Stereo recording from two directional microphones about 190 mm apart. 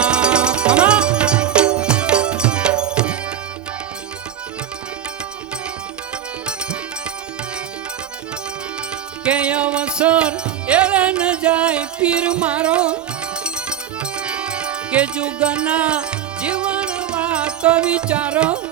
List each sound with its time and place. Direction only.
0.0 s music: 5° right (ahead or behind)
9.2 s music: 5° right (ahead or behind)